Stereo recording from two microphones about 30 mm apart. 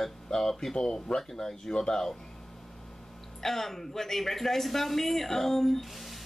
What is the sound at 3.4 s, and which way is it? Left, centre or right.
A man's voice, centre.